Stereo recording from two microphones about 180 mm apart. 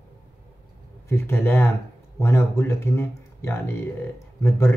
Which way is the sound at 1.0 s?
15° left (ahead or behind).